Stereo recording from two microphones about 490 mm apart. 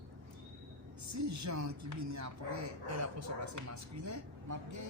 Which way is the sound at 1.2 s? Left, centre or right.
Right.